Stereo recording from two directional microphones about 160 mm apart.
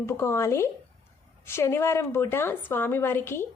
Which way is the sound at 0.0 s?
15° left (ahead or behind).